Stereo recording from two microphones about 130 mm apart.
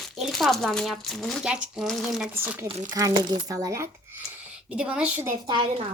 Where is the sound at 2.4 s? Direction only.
10° right (ahead or behind).